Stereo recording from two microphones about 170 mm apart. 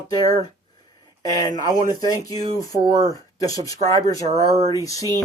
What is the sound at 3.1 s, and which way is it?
Speech, 20° left (ahead or behind).